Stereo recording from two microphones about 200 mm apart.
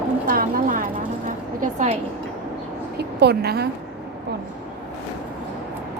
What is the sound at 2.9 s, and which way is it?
Speech, 55° right (ahead or behind).